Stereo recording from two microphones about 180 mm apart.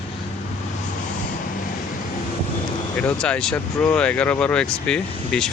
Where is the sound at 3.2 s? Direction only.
5° left (ahead or behind).